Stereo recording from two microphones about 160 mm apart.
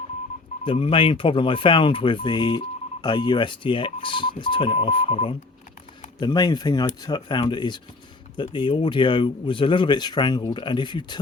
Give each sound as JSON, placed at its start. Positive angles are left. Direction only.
{"t": 0.6, "sound": "speech", "side_deg": 35}
{"t": 6.1, "sound": "speech", "side_deg": 25}